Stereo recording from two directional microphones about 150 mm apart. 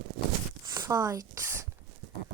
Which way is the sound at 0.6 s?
25° right (ahead or behind).